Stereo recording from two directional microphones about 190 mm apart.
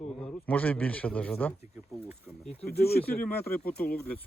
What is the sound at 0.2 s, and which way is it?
A man's voice, 5° left (ahead or behind).